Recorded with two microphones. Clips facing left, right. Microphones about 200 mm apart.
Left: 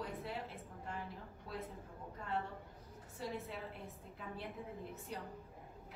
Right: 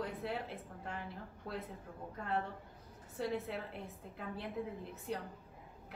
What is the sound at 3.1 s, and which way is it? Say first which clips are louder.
Speech: right 6 dB; 70° right (ahead or behind).